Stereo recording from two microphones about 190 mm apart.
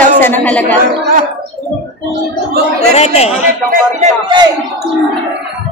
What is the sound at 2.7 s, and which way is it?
Speech, 35° left (ahead or behind).